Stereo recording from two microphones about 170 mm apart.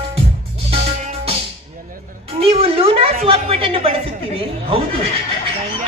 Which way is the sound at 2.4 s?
35° right (ahead or behind).